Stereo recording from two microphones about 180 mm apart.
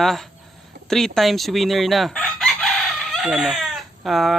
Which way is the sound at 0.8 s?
Centre (ahead or behind).